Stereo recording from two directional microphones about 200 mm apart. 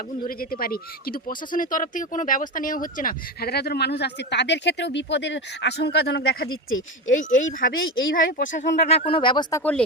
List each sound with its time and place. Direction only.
0.3 s speech: 45° left (ahead or behind)
6.5 s speech: 85° left
7.1 s speech: 40° left (ahead or behind); by 9.8 s 10° left (ahead or behind)